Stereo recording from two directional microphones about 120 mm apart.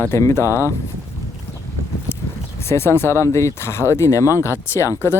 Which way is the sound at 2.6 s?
20° left (ahead or behind).